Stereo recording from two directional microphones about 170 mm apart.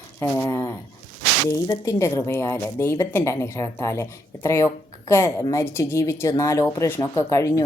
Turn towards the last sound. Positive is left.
turn(degrees=15)  # may be behind; listen again after turning